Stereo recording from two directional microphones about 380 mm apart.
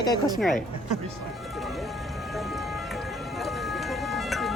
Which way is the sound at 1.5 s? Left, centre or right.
Centre.